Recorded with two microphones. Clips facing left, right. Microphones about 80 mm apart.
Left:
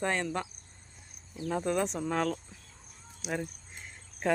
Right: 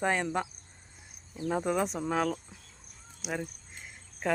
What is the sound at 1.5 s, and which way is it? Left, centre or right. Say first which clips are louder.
Speech: even; centre.